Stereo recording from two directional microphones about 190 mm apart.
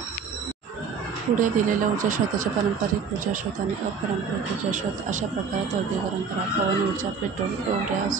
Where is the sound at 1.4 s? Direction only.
45° right (ahead or behind).